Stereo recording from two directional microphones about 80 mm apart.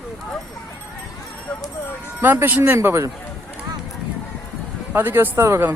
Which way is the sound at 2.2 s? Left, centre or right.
Right.